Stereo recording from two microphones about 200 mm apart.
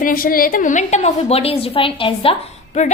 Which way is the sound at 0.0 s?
45° left (ahead or behind).